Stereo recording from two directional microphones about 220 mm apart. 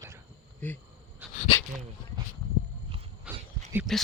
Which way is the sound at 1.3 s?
25° left (ahead or behind).